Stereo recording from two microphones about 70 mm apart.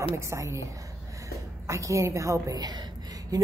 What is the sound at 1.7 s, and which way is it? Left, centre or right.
Speech, right.